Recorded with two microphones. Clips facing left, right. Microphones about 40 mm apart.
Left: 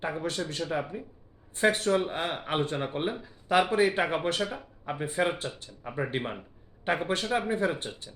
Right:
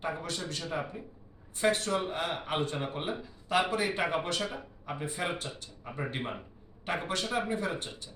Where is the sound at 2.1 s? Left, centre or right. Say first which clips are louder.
Left 2 dB; left.